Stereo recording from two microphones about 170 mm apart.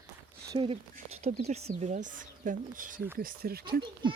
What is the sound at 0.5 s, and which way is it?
Speech, 30° right (ahead or behind).